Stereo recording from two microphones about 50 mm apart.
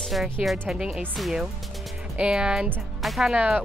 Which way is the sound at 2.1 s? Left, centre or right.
Centre.